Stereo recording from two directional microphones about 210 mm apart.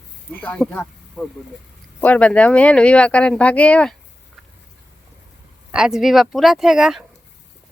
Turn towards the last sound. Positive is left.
turn(degrees=0)  # may be behind; listen again after turning